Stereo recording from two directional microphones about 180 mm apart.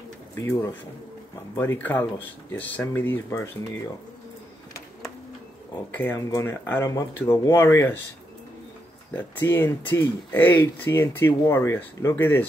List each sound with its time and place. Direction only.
0.4 s speech: 15° left (ahead or behind)
5.9 s speech: 15° left (ahead or behind)
9.1 s speech: 10° left (ahead or behind)